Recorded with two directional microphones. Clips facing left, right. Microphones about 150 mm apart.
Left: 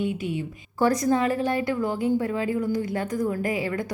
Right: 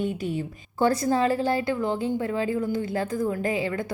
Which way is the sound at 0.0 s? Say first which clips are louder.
Even; 40° right (ahead or behind).